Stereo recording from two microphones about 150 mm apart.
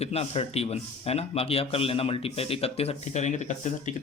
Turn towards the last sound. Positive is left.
turn(degrees=50)  # may be behind; listen again after turning